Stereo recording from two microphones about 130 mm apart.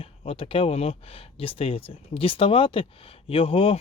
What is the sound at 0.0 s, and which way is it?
Speech, 50° left (ahead or behind).